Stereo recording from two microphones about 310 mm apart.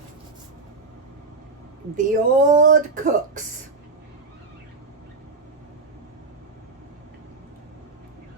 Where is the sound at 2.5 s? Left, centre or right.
Right.